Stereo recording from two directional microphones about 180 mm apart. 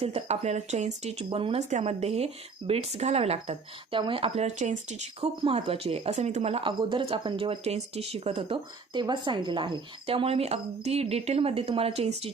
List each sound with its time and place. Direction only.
0.0 s speech: 35° right (ahead or behind)